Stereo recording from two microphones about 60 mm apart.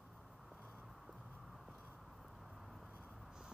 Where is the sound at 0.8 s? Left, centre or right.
Centre.